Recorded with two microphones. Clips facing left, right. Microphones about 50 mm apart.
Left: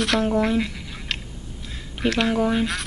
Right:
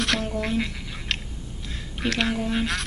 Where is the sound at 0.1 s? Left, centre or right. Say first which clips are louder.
Left 6 dB; centre.